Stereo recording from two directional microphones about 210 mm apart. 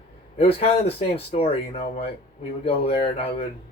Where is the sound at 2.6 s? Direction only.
25° left (ahead or behind).